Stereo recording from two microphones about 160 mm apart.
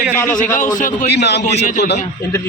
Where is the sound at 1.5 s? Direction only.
45° left (ahead or behind).